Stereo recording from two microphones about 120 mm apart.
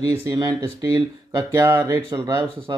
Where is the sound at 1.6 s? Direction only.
20° right (ahead or behind).